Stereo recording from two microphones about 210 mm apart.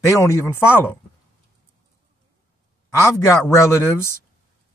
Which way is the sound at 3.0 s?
10° left (ahead or behind).